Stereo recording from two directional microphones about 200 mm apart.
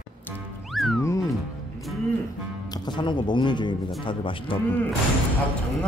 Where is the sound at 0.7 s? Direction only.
Centre (ahead or behind).